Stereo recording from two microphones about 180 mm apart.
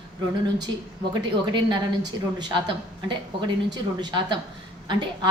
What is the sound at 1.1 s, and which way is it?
Speech, 25° right (ahead or behind).